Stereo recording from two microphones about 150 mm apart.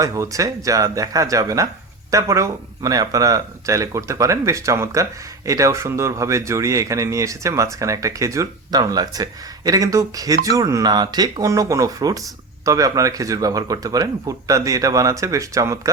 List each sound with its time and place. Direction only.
0.0 s speech: 20° right (ahead or behind)